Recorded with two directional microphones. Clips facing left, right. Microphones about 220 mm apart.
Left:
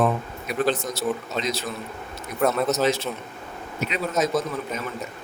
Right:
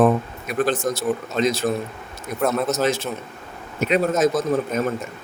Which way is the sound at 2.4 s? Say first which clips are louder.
Even; centre (ahead or behind).